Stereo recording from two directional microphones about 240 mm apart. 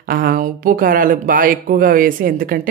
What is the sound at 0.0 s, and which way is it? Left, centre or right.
Speech, right.